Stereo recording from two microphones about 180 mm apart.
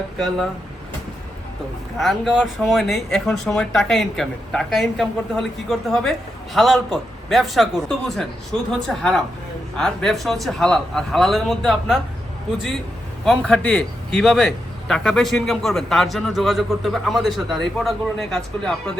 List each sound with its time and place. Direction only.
0.2 s speech: centre (ahead or behind)
2.0 s speech: centre (ahead or behind)
13.2 s speech: 5° left (ahead or behind)